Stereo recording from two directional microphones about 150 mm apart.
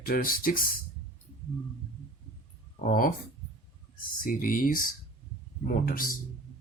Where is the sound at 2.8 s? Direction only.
70° left (ahead or behind).